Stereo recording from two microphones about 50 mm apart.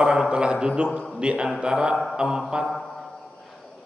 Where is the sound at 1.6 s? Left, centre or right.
Centre.